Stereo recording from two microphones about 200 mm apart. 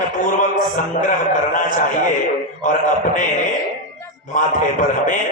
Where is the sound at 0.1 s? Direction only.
40° left (ahead or behind).